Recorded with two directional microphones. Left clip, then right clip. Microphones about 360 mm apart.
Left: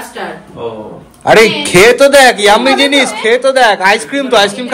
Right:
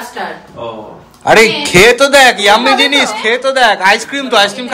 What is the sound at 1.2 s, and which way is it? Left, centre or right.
Speech, centre.